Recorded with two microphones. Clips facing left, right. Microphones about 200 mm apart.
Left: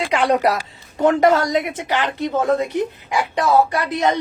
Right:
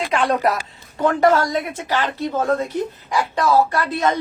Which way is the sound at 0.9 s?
20° left (ahead or behind).